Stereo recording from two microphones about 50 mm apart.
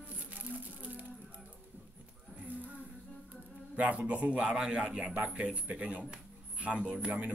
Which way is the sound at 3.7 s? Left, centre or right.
Right.